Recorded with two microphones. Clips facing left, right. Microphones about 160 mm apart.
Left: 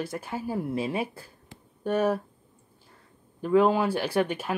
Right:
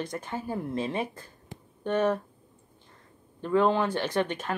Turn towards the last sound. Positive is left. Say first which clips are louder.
# left 2 dB
turn(degrees=10)  # may be behind; listen again after turning